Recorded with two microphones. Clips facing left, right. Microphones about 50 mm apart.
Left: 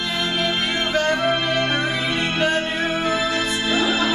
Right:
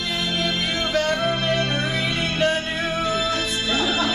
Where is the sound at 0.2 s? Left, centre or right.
Centre.